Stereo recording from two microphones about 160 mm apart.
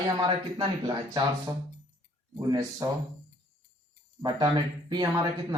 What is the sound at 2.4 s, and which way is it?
Speech, 25° right (ahead or behind).